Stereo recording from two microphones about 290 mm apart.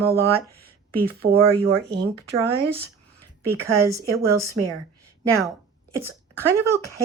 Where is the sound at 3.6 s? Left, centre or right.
Centre.